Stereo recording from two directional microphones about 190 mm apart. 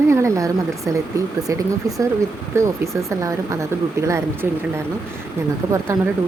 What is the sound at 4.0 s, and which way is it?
Speech, 15° right (ahead or behind).